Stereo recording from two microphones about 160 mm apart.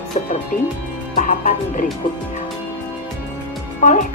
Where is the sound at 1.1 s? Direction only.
50° left (ahead or behind).